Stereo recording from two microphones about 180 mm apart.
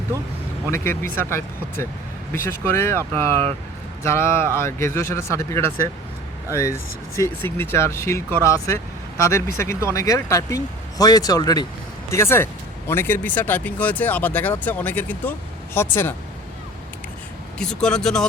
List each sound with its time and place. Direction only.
0.7 s speech: 15° left (ahead or behind)
4.0 s speech: 15° left (ahead or behind)
7.2 s speech: 15° left (ahead or behind)
17.6 s speech: 5° left (ahead or behind)